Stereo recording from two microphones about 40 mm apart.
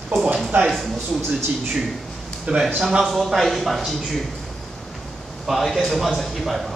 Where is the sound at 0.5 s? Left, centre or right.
Right.